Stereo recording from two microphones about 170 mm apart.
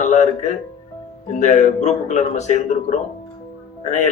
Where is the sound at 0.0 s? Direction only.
45° left (ahead or behind).